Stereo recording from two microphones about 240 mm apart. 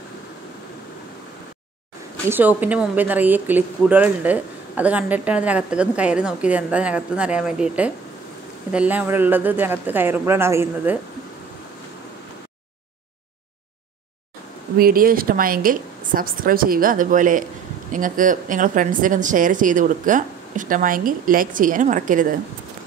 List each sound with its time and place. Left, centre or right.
2.2 s speech: centre
14.8 s speech: right